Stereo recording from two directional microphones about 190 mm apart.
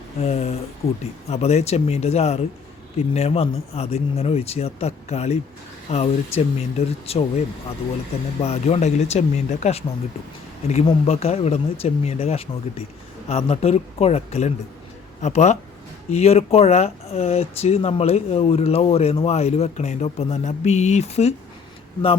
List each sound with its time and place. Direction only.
0.2 s speech: 30° left (ahead or behind)